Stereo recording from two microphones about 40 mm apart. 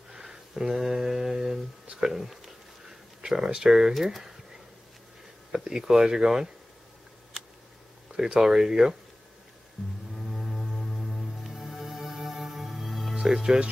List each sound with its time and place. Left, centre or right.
0.1 s a sound: centre
2.0 s speech: centre
2.9 s a sound: centre
3.9 s speech: centre
5.5 s speech: centre
8.2 s speech: centre
10.1 s music: centre
13.1 s speech: right